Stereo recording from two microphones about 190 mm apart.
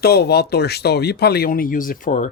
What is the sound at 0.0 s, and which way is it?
Speech, 55° left (ahead or behind).